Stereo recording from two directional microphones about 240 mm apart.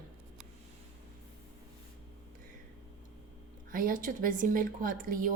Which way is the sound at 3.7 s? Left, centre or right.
Right.